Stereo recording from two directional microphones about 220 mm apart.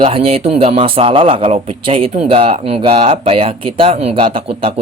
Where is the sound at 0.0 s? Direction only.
25° right (ahead or behind).